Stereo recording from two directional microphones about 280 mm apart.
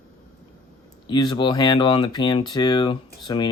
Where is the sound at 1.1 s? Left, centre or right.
Centre.